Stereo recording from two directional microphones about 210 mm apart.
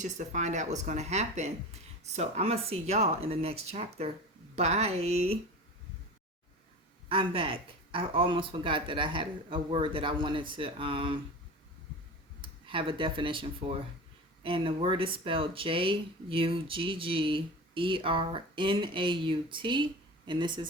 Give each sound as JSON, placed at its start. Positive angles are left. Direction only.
{"t": 0.0, "sound": "speech", "side_deg": -35}
{"t": 7.1, "sound": "speech", "side_deg": -25}
{"t": 12.4, "sound": "speech", "side_deg": -25}